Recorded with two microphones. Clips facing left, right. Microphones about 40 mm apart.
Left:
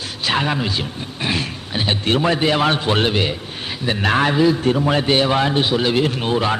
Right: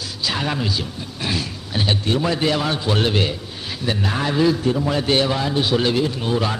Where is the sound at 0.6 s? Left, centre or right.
Left.